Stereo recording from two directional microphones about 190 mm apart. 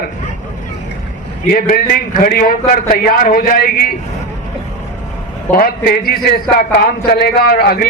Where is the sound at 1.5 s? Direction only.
50° left (ahead or behind).